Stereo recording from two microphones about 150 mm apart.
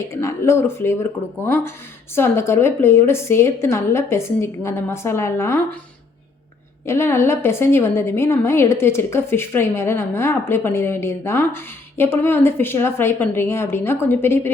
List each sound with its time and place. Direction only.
0.1 s a woman's voice: 20° left (ahead or behind)
6.8 s a woman's voice: 15° left (ahead or behind)